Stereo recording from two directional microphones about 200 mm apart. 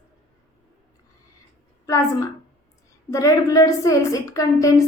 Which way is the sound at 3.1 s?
15° left (ahead or behind).